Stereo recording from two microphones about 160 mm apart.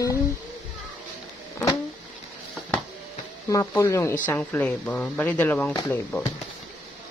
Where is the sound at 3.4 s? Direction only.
20° left (ahead or behind).